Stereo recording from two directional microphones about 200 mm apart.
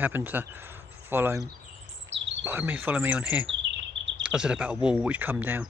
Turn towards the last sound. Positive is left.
turn(degrees=-10)  # may be behind; listen again after turning